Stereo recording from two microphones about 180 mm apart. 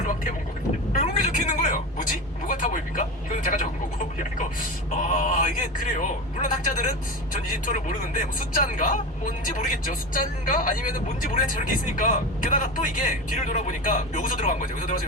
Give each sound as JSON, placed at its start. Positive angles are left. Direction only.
{"t": 0.9, "sound": "a sound", "side_deg": 50}
{"t": 2.5, "sound": "vehicle", "side_deg": 45}
{"t": 4.9, "sound": "speech", "side_deg": 40}